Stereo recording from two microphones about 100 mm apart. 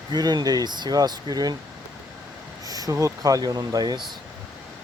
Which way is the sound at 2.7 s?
35° right (ahead or behind).